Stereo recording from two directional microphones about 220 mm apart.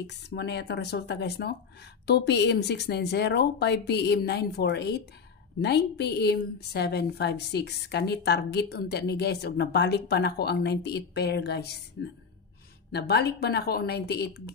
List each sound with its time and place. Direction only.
0.0 s a woman's voice: 50° left (ahead or behind)
12.9 s a woman's voice: 50° left (ahead or behind)